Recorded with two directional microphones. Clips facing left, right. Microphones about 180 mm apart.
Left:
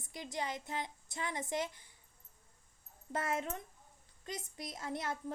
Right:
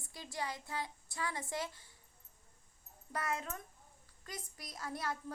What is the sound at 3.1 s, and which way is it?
A woman's voice, 25° left (ahead or behind).